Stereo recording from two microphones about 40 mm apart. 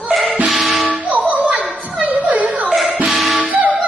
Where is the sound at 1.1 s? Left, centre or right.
Right.